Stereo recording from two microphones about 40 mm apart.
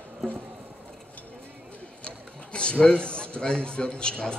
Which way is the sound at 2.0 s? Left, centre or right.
Left.